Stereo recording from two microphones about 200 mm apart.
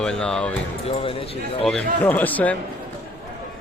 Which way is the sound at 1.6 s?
5° left (ahead or behind).